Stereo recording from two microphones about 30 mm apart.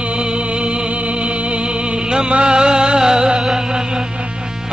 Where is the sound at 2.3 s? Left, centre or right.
Right.